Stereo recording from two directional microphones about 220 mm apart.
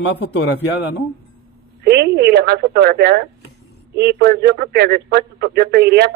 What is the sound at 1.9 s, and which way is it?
Speech, 50° right (ahead or behind).